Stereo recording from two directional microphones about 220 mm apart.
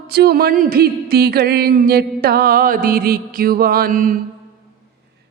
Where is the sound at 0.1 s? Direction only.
45° right (ahead or behind).